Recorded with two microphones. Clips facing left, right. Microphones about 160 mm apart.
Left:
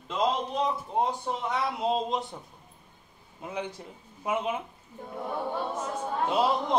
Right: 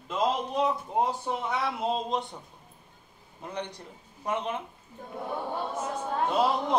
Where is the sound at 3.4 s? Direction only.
5° left (ahead or behind).